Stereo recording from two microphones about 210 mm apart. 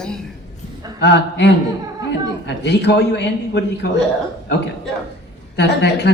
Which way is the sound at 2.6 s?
55° left (ahead or behind).